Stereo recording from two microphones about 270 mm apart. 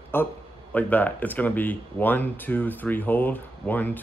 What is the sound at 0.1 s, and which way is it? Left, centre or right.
Speech, centre.